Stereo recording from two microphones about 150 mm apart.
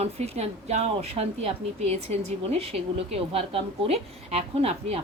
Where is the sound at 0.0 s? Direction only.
45° right (ahead or behind).